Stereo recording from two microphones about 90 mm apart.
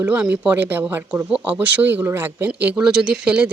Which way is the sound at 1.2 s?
10° right (ahead or behind).